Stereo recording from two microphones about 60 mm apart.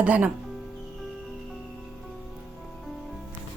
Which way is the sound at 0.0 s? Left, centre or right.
Right.